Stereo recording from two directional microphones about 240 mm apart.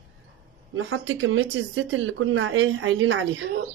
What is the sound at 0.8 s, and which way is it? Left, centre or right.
Speech, right.